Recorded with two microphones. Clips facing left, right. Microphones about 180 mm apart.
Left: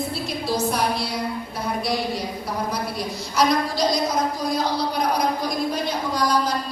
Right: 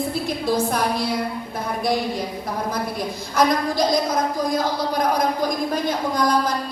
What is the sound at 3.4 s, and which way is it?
A woman's voice, 50° right (ahead or behind).